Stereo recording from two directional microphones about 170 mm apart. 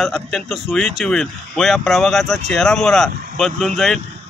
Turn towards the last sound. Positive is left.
turn(degrees=0)  # may be behind; listen again after turning